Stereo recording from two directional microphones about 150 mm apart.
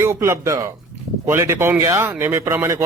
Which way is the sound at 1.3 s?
15° right (ahead or behind).